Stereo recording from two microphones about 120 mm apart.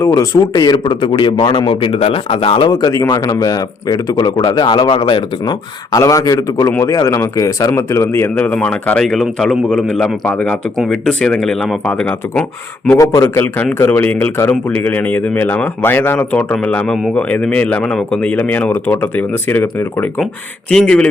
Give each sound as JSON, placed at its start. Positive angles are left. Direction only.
{"t": 0.0, "sound": "a man's voice", "side_deg": 25}
{"t": 13.0, "sound": "a man's voice", "side_deg": 25}
{"t": 20.7, "sound": "a man's voice", "side_deg": 5}